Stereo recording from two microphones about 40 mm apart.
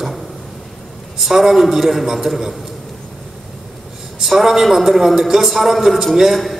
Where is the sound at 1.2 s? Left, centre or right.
Centre.